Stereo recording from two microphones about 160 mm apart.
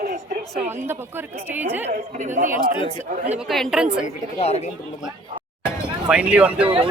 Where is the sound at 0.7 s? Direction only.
15° right (ahead or behind).